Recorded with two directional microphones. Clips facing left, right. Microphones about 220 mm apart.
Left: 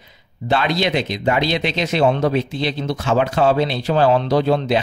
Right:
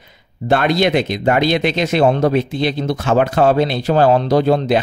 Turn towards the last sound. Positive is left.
turn(degrees=-50)  # may be behind; listen again after turning